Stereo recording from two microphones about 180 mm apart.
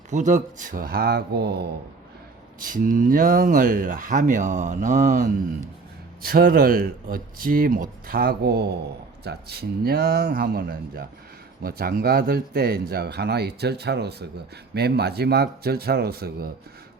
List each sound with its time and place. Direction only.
0.1 s speech: 45° right (ahead or behind); by 1.6 s 65° right (ahead or behind)
2.6 s speech: 50° right (ahead or behind)
6.2 s speech: 55° right (ahead or behind)